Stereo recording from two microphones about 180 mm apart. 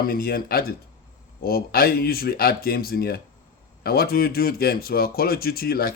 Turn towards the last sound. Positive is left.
turn(degrees=55)  # may be behind; listen again after turning